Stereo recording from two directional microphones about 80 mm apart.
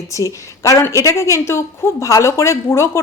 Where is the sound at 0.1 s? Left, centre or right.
Left.